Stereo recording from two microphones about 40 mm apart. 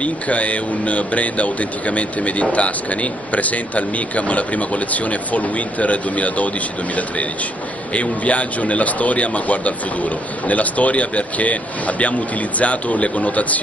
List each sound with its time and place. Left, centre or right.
0.0 s speech: left
7.9 s speech: left